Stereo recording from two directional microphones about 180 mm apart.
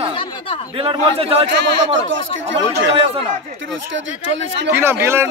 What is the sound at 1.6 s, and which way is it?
Speech, 90° right.